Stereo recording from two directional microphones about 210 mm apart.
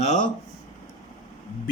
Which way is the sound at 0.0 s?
35° left (ahead or behind).